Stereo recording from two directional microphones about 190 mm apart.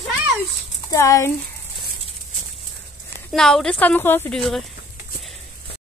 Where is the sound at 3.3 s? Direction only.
5° left (ahead or behind).